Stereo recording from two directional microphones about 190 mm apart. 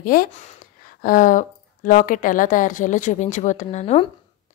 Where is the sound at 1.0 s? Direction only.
45° left (ahead or behind).